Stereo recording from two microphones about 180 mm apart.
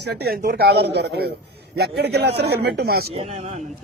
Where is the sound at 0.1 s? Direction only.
60° right (ahead or behind).